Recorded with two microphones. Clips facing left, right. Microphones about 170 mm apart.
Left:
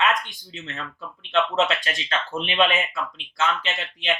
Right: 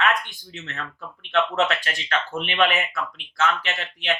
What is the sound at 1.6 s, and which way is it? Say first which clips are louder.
Speech: even; 20° left (ahead or behind).